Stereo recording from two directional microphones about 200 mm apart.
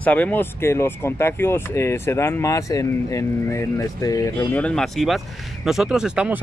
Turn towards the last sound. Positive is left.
turn(degrees=-5)  # may be behind; listen again after turning